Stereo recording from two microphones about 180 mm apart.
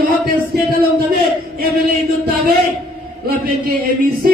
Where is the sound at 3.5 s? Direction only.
55° right (ahead or behind).